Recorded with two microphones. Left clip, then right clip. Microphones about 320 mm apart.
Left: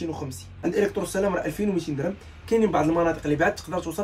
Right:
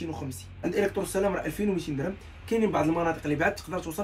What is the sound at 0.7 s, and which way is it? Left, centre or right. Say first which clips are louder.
Speech: left 2 dB; centre.